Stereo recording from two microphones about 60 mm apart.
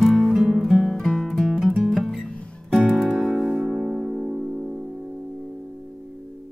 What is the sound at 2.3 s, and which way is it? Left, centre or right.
Music, left.